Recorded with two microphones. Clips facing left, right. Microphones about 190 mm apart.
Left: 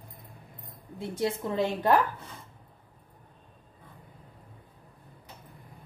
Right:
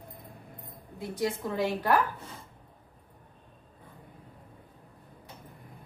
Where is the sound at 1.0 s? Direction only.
25° left (ahead or behind).